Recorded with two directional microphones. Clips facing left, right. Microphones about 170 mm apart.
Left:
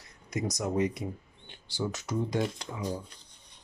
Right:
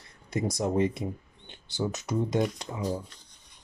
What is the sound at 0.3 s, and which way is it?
Speech, 30° right (ahead or behind).